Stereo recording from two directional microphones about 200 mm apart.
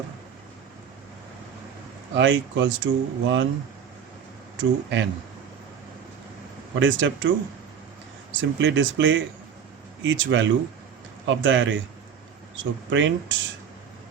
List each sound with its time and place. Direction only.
2.1 s speech: 65° right (ahead or behind)
4.5 s speech: 65° right (ahead or behind)
6.7 s speech: 70° right (ahead or behind)
8.4 s speech: 65° right (ahead or behind)